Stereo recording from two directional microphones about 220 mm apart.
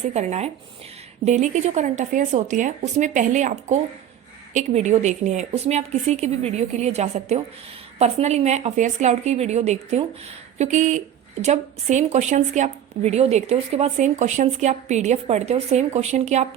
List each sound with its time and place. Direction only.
0.1 s speech: 30° right (ahead or behind)